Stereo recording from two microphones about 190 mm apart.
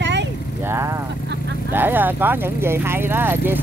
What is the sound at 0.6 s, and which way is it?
Vehicle, 15° right (ahead or behind).